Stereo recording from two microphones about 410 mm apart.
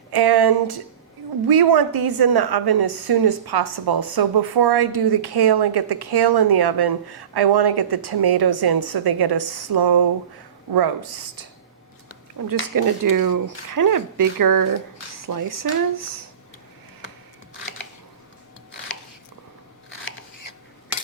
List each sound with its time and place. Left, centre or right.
0.1 s a woman's voice: right
12.4 s speech: right